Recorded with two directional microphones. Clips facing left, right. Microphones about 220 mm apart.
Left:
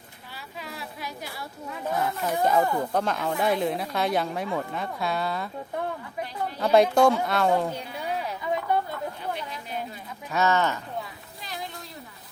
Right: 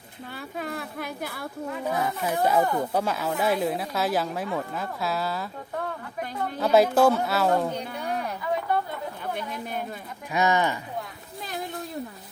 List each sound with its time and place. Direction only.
0.3 s speech: 50° right (ahead or behind)
2.0 s speech: 10° right (ahead or behind)
6.6 s speech: 5° right (ahead or behind)
9.3 s a sound: 50° right (ahead or behind)
10.3 s speech: 15° right (ahead or behind)